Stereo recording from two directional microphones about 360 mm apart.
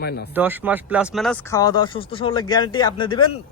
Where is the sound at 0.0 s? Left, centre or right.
Left.